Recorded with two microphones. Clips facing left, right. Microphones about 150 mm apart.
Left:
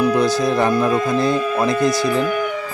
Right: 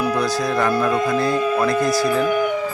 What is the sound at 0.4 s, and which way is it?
Music, 25° left (ahead or behind).